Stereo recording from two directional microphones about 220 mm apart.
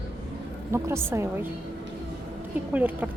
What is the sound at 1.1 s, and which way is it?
Speech, 10° right (ahead or behind).